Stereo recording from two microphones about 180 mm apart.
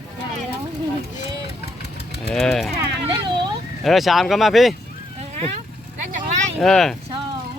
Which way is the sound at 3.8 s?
Centre (ahead or behind).